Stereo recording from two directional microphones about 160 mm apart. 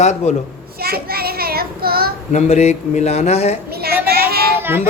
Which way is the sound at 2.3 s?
45° left (ahead or behind).